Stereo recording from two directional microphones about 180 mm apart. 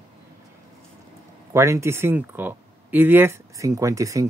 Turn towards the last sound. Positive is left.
turn(degrees=-15)  # may be behind; listen again after turning